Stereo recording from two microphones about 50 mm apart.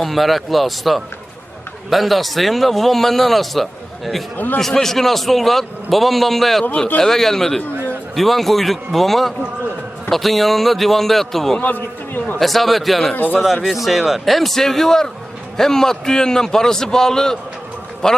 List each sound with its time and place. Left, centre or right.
0.0 s a man's voice: centre
11.6 s a man's voice: left
12.4 s a man's voice: centre
13.1 s a man's voice: left
13.4 s a man's voice: centre